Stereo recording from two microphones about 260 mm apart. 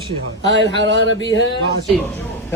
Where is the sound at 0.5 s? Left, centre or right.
Right.